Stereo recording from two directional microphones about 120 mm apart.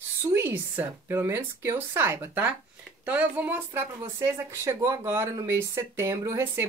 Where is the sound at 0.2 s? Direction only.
20° right (ahead or behind).